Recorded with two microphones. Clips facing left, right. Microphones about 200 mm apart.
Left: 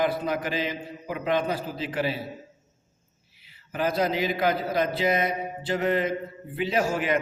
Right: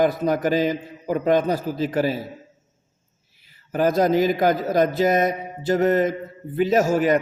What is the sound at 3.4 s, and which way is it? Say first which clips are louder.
A man's voice: right 7 dB; 45° right (ahead or behind).